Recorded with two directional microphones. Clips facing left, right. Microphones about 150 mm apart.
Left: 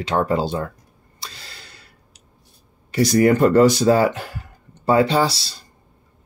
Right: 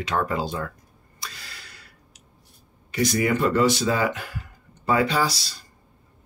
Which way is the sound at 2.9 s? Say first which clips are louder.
Left 7 dB; 35° left (ahead or behind).